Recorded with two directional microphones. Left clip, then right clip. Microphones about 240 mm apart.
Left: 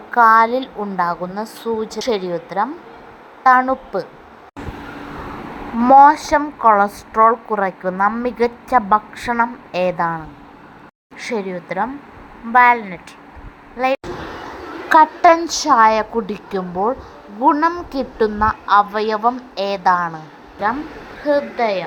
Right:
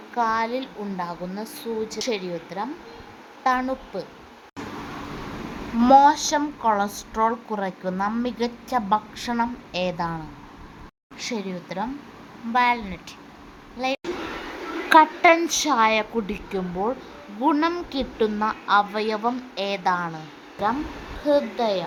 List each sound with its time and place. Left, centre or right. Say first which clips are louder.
0.1 s a woman's voice: left 12 dB; centre
5.9 s a woman's voice: left 6 dB; centre
11.3 s a woman's voice: left 8 dB; centre
21.2 s a woman's voice: left 4 dB; centre